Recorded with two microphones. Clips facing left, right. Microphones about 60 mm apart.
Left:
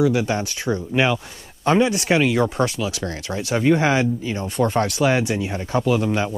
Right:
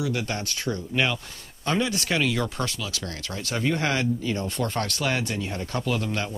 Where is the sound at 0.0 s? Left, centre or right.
Centre.